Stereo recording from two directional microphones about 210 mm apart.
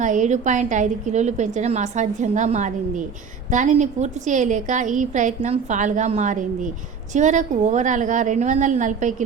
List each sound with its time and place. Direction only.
0.0 s a woman's voice: 35° right (ahead or behind)